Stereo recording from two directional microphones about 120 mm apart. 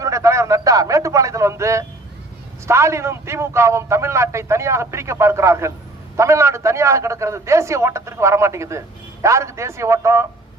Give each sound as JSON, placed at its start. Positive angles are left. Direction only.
{"t": 0.0, "sound": "a man's voice", "side_deg": -25}